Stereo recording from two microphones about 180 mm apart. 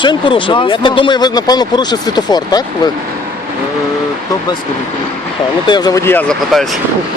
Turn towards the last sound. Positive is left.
turn(degrees=5)  # may be behind; listen again after turning